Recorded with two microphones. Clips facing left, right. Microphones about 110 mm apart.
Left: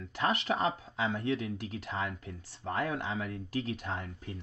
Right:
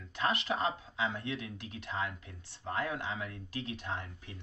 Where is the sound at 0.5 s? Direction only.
30° left (ahead or behind).